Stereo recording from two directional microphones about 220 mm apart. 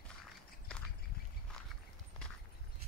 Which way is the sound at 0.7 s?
5° left (ahead or behind).